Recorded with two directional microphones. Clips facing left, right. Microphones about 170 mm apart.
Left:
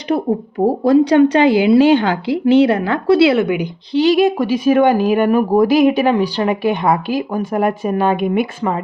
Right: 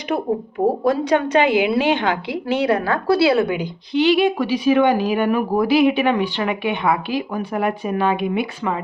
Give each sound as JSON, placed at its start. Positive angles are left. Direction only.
{"t": 0.9, "sound": "a woman's voice", "side_deg": 30}
{"t": 4.0, "sound": "speech", "side_deg": 40}